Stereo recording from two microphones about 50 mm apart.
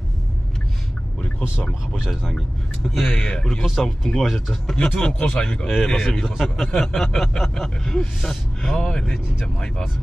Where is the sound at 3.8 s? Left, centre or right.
Centre.